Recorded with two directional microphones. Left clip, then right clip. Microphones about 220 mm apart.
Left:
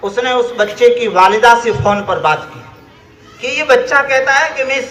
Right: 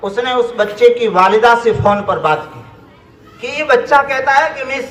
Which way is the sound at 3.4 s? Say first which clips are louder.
Left 2 dB; 55° right (ahead or behind).